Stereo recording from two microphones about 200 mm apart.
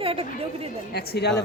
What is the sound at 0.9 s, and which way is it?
Speech, 50° left (ahead or behind).